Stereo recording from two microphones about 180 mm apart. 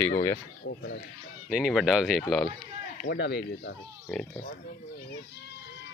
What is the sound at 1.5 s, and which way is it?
Speech, 5° right (ahead or behind).